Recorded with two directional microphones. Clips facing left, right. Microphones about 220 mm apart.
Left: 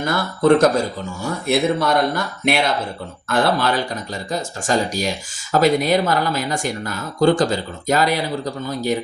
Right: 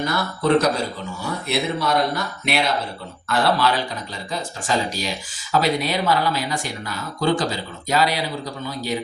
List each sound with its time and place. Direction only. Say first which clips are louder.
0.0 s a man's voice: left 4 dB; 50° left (ahead or behind)